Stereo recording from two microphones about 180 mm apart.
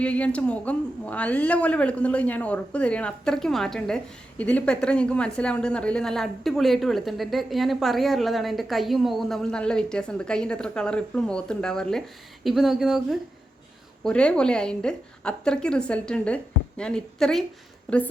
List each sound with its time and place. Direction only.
0.0 s a woman's voice: 5° left (ahead or behind)